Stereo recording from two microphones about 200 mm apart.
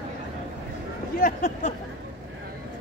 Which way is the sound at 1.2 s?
40° left (ahead or behind).